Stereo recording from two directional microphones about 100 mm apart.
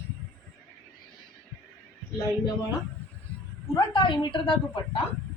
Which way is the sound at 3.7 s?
50° left (ahead or behind).